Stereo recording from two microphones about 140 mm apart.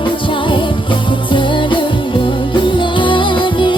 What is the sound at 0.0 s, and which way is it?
Music, 35° left (ahead or behind).